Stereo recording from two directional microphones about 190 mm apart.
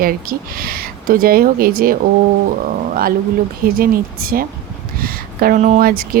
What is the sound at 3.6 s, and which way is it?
Speech, 50° right (ahead or behind).